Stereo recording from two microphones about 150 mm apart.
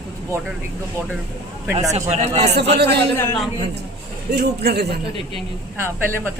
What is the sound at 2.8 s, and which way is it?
Speech, 90° right.